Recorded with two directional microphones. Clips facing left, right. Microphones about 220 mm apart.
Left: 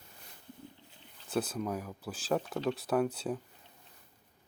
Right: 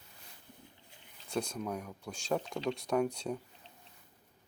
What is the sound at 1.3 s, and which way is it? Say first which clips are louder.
Speech: left 3 dB; 5° left (ahead or behind).